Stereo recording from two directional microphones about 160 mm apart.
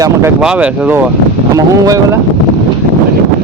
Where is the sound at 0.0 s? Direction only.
20° right (ahead or behind).